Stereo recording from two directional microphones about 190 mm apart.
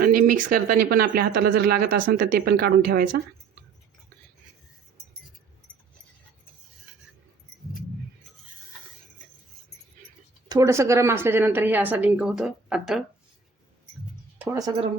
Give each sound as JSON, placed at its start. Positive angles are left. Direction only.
{"t": 0.0, "sound": "speech", "side_deg": -50}
{"t": 10.5, "sound": "a woman's voice", "side_deg": -15}
{"t": 14.3, "sound": "music", "side_deg": -10}